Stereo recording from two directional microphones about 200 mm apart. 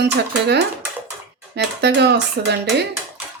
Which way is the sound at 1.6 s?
55° right (ahead or behind).